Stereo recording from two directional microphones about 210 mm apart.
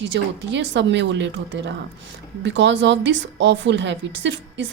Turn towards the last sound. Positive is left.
turn(degrees=-60)  # may be behind; listen again after turning